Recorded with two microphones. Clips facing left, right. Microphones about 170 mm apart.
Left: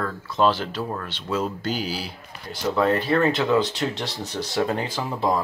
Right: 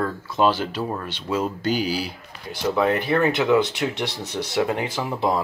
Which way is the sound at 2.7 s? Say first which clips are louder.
Even; 15° right (ahead or behind).